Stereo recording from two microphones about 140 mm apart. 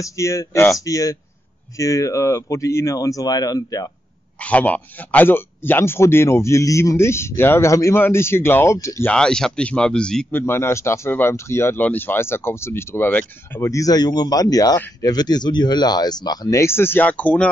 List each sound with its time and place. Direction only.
0.0 s speech: 20° left (ahead or behind)
4.4 s speech: 10° left (ahead or behind)
9.1 s speech: 5° left (ahead or behind)
10.4 s speech: 15° left (ahead or behind)